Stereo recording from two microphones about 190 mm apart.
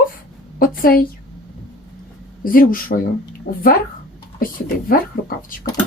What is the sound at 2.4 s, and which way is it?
A woman's voice, 45° left (ahead or behind).